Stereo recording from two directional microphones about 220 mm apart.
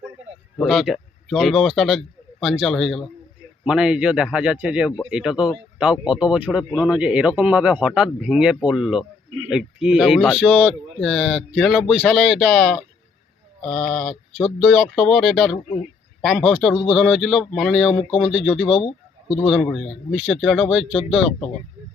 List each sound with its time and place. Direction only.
0.6 s a man's voice: centre (ahead or behind)
18.7 s speech: 25° left (ahead or behind)
19.4 s speech: centre (ahead or behind)